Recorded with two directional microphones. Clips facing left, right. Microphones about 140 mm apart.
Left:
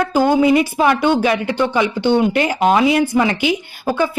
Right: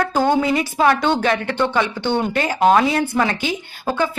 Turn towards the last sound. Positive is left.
turn(degrees=10)  # may be behind; listen again after turning